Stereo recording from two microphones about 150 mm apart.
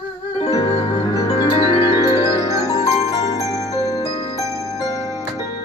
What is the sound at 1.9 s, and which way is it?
Music, 25° left (ahead or behind).